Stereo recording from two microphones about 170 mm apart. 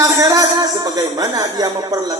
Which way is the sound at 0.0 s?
20° right (ahead or behind).